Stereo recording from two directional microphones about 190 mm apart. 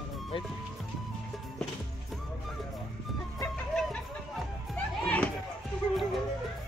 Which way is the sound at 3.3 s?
10° left (ahead or behind).